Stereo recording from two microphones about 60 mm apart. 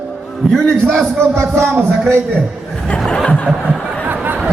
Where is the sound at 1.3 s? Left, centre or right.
Right.